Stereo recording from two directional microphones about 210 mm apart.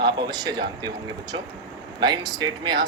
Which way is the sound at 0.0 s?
20° right (ahead or behind).